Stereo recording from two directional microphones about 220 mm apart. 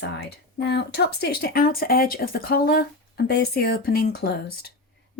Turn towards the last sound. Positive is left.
turn(degrees=45)  # may be behind; listen again after turning